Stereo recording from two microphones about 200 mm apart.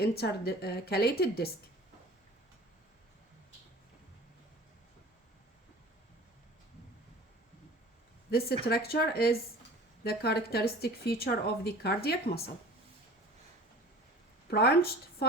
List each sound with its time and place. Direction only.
0.0 s speech: 50° left (ahead or behind)
8.6 s speech: 50° left (ahead or behind)
14.4 s speech: 50° left (ahead or behind)